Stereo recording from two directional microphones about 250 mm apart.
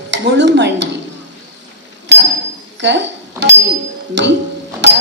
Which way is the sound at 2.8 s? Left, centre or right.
Right.